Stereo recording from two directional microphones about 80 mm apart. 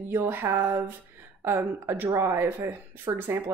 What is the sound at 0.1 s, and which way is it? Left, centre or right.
Speech, right.